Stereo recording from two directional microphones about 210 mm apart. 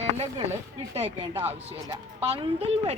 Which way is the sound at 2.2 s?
30° right (ahead or behind).